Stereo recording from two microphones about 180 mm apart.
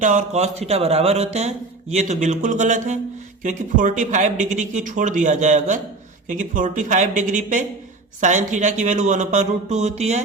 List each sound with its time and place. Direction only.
0.0 s speech: 45° right (ahead or behind)